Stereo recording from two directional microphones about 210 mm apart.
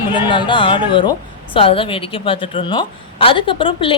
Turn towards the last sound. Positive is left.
turn(degrees=25)  # may be behind; listen again after turning